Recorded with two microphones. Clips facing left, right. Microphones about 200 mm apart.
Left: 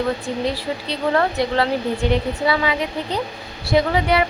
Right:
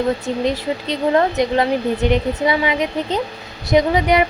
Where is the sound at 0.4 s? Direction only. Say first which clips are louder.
Right 4 dB; 20° right (ahead or behind).